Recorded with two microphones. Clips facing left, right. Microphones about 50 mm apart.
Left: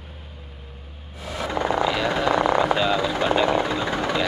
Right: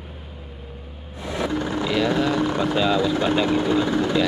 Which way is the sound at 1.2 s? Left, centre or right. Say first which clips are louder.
Right 4 dB; right.